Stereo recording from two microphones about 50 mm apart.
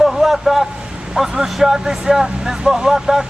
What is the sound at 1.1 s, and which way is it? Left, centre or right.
Speech, centre.